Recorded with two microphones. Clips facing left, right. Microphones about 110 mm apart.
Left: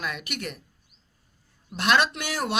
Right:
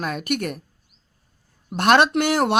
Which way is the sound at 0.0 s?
40° right (ahead or behind).